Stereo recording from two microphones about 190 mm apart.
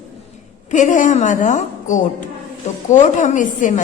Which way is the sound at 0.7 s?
40° left (ahead or behind).